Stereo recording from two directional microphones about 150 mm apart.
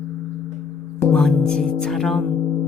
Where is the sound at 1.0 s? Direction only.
5° left (ahead or behind).